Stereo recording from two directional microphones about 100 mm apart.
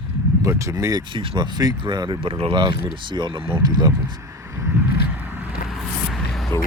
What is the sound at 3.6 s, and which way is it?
Speech, 40° right (ahead or behind).